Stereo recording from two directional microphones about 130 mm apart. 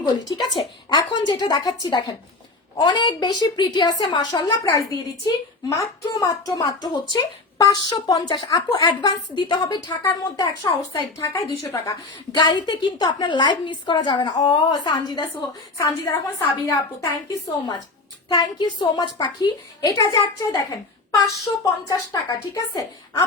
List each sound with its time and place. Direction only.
0.0 s a woman's voice: 30° left (ahead or behind)
12.4 s a woman's voice: 35° left (ahead or behind)
18.3 s a woman's voice: 35° left (ahead or behind)